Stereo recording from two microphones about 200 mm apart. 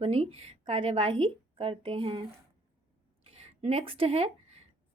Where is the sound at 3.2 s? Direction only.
30° right (ahead or behind).